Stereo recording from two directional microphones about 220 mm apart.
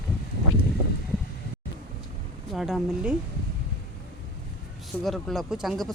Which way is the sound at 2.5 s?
Centre (ahead or behind).